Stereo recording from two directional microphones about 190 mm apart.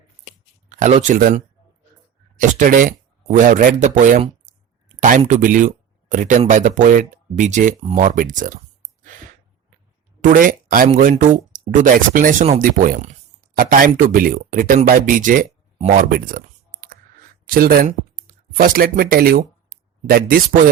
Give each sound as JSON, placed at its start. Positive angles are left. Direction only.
{"t": 1.0, "sound": "speech", "side_deg": -45}
{"t": 10.2, "sound": "speech", "side_deg": -45}